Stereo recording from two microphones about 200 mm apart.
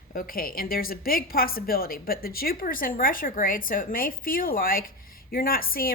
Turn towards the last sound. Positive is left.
turn(degrees=45)  # may be behind; listen again after turning